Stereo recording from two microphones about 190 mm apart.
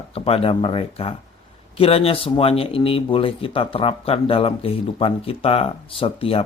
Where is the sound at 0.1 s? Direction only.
30° left (ahead or behind).